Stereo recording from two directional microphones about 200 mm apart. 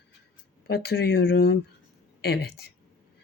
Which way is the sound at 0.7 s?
50° left (ahead or behind).